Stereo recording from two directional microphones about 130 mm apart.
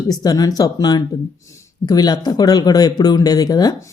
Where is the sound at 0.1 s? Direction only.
30° left (ahead or behind).